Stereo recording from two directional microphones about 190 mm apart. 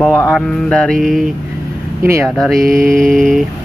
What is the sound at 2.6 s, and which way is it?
Mantra, 45° right (ahead or behind).